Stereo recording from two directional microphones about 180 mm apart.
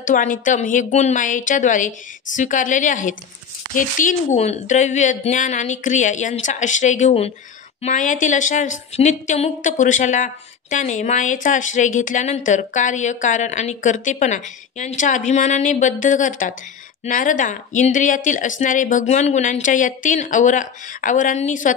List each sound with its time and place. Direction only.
0.0 s a woman's voice: 45° left (ahead or behind)